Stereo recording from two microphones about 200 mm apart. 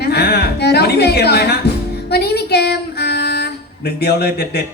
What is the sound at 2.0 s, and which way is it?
Female singing, 55° left (ahead or behind).